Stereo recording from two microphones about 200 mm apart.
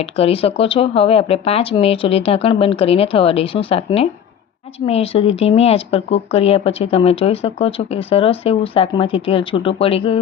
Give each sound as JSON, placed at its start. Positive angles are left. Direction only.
{"t": 0.0, "sound": "speech", "side_deg": 30}